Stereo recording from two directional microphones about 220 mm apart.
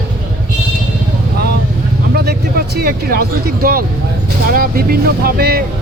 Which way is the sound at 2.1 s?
45° right (ahead or behind).